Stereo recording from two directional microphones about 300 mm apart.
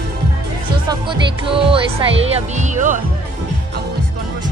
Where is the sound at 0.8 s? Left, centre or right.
Centre.